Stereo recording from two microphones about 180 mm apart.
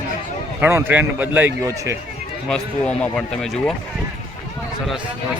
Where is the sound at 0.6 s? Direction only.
10° right (ahead or behind).